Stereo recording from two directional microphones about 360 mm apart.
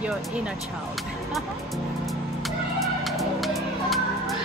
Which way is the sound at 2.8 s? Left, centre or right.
Centre.